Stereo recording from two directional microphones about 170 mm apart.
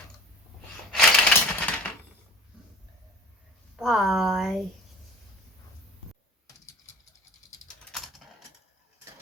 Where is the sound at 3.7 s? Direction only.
5° right (ahead or behind).